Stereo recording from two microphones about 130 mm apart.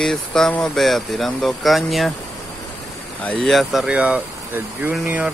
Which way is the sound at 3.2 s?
5° left (ahead or behind).